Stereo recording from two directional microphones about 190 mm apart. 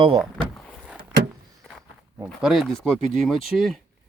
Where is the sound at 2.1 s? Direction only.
5° right (ahead or behind).